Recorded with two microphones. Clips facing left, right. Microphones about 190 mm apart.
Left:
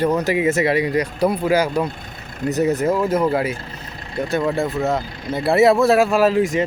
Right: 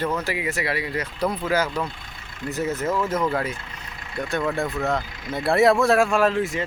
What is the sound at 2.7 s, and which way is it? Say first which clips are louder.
Speech: left 6 dB; 35° left (ahead or behind).